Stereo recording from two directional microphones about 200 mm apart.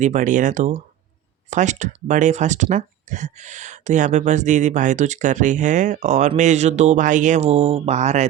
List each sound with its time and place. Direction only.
0.0 s speech: 40° right (ahead or behind)